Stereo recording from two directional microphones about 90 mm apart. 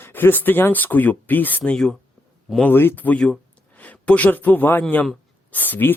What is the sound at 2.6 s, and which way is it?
A man's voice, 25° left (ahead or behind).